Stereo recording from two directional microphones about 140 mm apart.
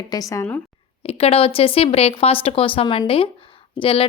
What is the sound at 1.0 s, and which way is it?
Speech, 45° left (ahead or behind).